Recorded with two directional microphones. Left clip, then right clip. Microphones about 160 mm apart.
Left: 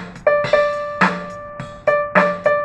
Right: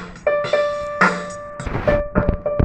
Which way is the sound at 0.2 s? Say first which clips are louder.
Left 3 dB; 15° right (ahead or behind).